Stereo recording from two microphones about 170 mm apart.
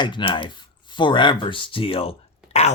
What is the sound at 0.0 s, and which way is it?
Speech, 30° left (ahead or behind).